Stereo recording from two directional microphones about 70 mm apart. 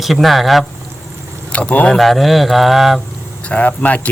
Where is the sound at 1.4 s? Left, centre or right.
Left.